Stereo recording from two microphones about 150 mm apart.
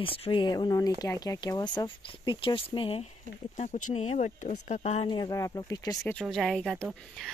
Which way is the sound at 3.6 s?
50° left (ahead or behind).